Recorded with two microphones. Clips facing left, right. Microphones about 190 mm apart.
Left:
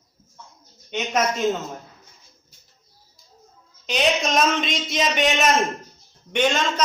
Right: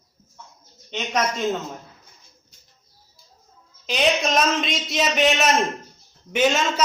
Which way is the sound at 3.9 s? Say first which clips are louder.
Even; centre (ahead or behind).